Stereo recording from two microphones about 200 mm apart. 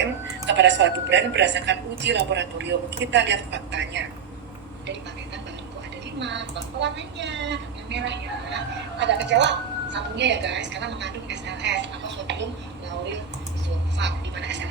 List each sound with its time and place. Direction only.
0.0 s a woman's voice: 60° right (ahead or behind)
6.1 s a woman's voice: 60° right (ahead or behind)
14.0 s a woman's voice: 60° right (ahead or behind)